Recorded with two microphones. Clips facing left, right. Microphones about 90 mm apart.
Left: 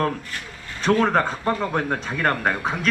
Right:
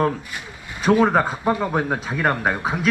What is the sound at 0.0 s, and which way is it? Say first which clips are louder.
Speech: right 3 dB; 10° right (ahead or behind).